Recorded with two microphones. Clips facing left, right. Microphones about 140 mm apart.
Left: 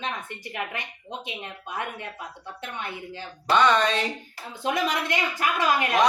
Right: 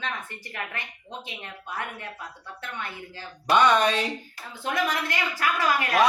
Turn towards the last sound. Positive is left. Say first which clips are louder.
# left 1 dB
turn(degrees=20)  # may be behind; listen again after turning